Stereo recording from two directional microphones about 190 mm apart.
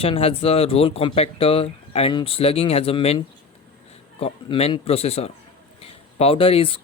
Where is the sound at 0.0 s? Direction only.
30° left (ahead or behind).